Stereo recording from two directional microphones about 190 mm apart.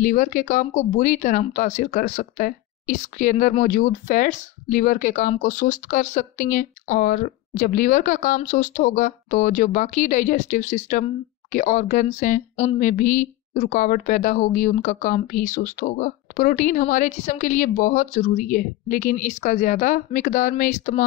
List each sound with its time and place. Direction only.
0.0 s speech: 40° left (ahead or behind)